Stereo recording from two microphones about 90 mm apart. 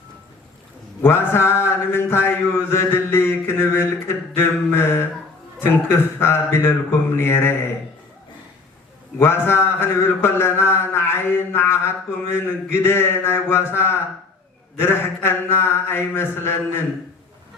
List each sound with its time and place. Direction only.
1.0 s mantra: 25° left (ahead or behind)
9.1 s mantra: 25° left (ahead or behind)